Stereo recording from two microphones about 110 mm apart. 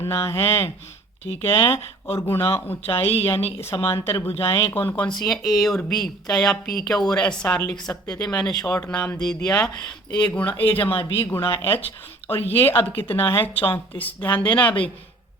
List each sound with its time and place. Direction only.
0.0 s speech: 25° left (ahead or behind)
2.1 s speech: 20° left (ahead or behind)
5.0 s a woman's voice: centre (ahead or behind)